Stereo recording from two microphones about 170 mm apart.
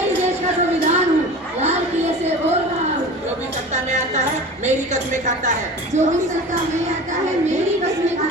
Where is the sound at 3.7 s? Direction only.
45° right (ahead or behind).